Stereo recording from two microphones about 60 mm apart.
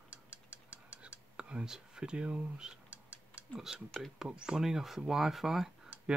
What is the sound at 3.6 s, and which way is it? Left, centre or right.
Speech, centre.